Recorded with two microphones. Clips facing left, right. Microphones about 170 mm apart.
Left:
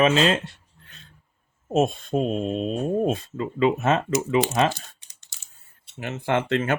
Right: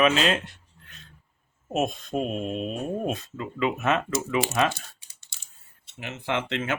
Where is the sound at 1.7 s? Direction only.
30° left (ahead or behind).